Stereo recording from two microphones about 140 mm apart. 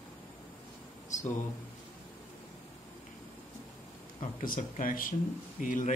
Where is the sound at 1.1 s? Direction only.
60° left (ahead or behind).